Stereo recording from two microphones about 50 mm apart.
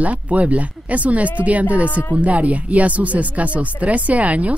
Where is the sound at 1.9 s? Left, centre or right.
Left.